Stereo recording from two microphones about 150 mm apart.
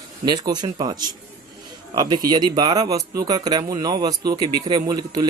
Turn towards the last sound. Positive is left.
turn(degrees=-30)  # may be behind; listen again after turning